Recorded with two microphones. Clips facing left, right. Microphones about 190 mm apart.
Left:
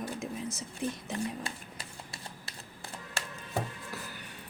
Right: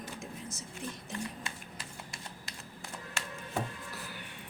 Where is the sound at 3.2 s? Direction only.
35° left (ahead or behind).